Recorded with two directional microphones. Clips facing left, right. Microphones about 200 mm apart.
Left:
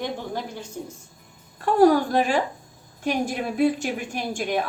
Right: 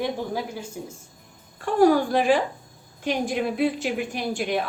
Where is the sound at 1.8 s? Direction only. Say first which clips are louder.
Even; 45° left (ahead or behind).